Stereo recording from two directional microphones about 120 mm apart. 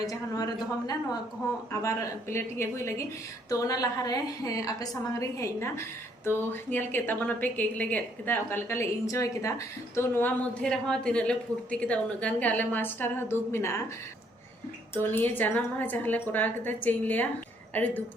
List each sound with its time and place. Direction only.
0.0 s a woman's voice: 30° left (ahead or behind)
10.6 s a woman's voice: 5° left (ahead or behind); by 13.8 s 20° left (ahead or behind)
15.0 s a woman's voice: 15° left (ahead or behind)